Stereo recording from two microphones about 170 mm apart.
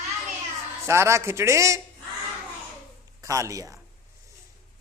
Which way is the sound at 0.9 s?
15° right (ahead or behind).